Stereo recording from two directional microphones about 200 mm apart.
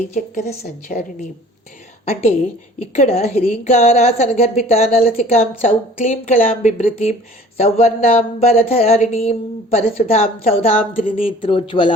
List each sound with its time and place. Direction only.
0.1 s speech: 35° left (ahead or behind)
2.0 s speech: 30° left (ahead or behind)